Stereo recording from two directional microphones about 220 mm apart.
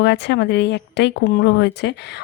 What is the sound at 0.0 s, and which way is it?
Speech, 50° left (ahead or behind).